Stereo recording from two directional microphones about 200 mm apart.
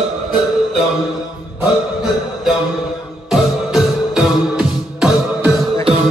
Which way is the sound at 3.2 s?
5° right (ahead or behind).